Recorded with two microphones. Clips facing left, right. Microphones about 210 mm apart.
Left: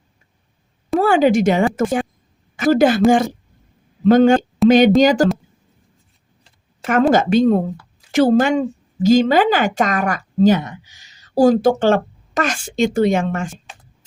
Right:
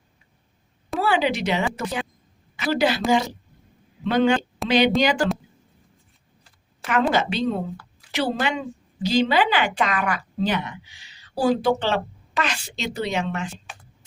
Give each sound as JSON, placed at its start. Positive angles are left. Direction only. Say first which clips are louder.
{"t": 0.9, "sound": "speech", "louder": "left 8 dB", "side_deg": 45}
{"t": 4.6, "sound": "a sound", "louder": "left 13 dB", "side_deg": 0}
{"t": 4.9, "sound": "speech", "louder": "left 8 dB", "side_deg": 40}
{"t": 7.1, "sound": "speech", "louder": "left 9 dB", "side_deg": 45}